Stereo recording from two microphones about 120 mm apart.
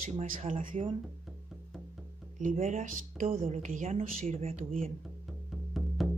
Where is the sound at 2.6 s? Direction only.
75° right (ahead or behind).